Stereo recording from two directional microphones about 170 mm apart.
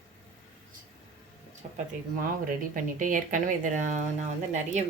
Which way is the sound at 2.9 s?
50° right (ahead or behind).